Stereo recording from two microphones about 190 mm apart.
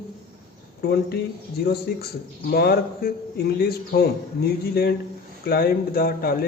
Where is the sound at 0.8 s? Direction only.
60° left (ahead or behind).